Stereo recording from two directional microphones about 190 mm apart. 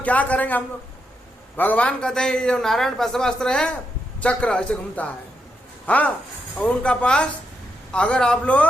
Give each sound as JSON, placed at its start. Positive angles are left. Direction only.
{"t": 0.0, "sound": "a man's voice", "side_deg": 5}